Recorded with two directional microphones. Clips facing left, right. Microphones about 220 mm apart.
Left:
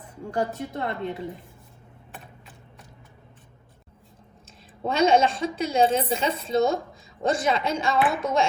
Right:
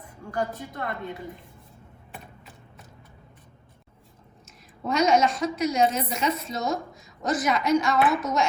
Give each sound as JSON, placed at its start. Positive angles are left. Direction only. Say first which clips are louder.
{"t": 0.3, "sound": "a woman's voice", "louder": "left 3 dB", "side_deg": 25}
{"t": 2.1, "sound": "mechanisms", "louder": "right 1 dB", "side_deg": 0}
{"t": 4.9, "sound": "a woman's voice", "louder": "left 1 dB", "side_deg": 30}